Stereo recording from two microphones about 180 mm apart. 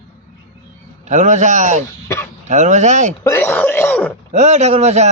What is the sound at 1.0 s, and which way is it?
A man's voice, 40° right (ahead or behind).